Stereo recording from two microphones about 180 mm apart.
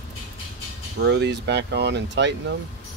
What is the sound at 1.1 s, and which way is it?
Speech, 80° right.